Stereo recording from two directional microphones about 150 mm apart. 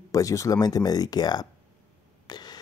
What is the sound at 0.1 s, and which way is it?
Speech, 20° left (ahead or behind).